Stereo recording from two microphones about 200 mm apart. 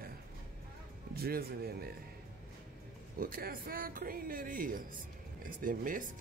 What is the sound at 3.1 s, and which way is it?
Speech, 45° right (ahead or behind).